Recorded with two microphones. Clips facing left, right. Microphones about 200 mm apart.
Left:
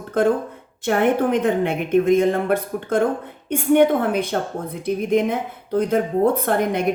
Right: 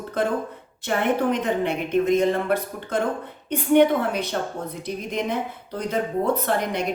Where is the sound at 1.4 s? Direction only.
50° left (ahead or behind).